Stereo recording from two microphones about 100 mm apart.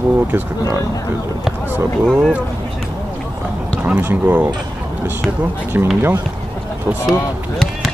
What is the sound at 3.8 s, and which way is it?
Speech, 15° right (ahead or behind).